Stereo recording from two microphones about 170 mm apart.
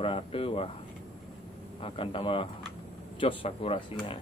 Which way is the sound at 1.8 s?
35° left (ahead or behind).